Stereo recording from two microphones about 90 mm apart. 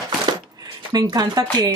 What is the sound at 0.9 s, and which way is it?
Speech, 45° right (ahead or behind).